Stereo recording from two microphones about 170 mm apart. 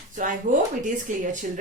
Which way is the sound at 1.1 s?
45° right (ahead or behind).